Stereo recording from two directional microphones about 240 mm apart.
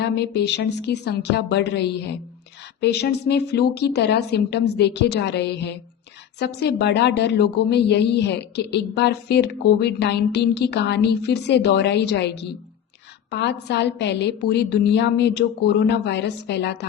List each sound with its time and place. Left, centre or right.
0.0 s a woman's voice: left